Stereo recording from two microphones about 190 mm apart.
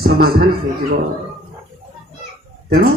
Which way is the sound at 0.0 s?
55° right (ahead or behind).